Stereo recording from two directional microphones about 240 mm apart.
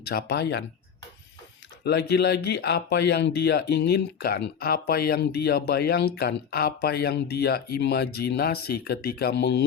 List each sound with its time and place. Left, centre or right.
0.0 s speech: left
1.8 s speech: left